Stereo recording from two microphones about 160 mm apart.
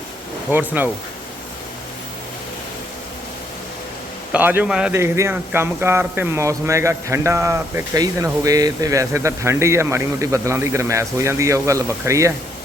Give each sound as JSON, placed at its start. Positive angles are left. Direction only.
{"t": 0.5, "sound": "speech", "side_deg": -10}
{"t": 4.3, "sound": "speech", "side_deg": -10}
{"t": 4.9, "sound": "speech", "side_deg": -15}